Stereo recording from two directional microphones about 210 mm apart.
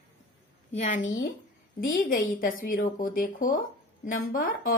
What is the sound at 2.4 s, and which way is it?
Speech, 40° left (ahead or behind).